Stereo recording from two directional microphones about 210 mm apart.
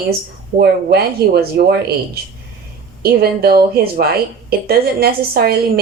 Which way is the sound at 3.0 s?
45° right (ahead or behind).